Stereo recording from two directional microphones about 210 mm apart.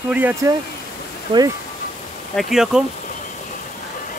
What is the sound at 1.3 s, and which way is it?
Speech, 20° right (ahead or behind).